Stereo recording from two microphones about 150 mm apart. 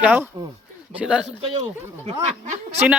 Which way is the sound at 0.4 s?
30° right (ahead or behind).